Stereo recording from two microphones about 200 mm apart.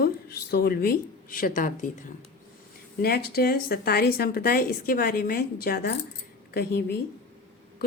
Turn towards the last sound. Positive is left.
turn(degrees=55)  # may be behind; listen again after turning